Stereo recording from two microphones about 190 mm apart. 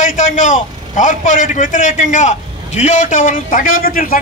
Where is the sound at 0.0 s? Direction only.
40° left (ahead or behind).